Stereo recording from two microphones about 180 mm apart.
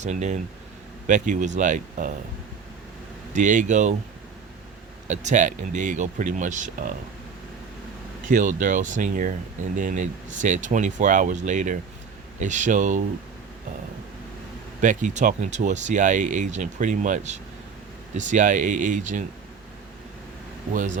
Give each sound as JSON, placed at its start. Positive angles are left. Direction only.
{"t": 0.0, "sound": "speech", "side_deg": -40}
{"t": 3.3, "sound": "speech", "side_deg": -45}
{"t": 5.0, "sound": "speech", "side_deg": -40}
{"t": 8.3, "sound": "speech", "side_deg": -45}
{"t": 14.8, "sound": "speech", "side_deg": -45}
{"t": 20.7, "sound": "speech", "side_deg": -45}